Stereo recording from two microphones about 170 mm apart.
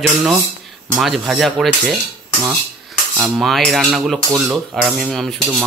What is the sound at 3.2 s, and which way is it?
Speech, centre (ahead or behind).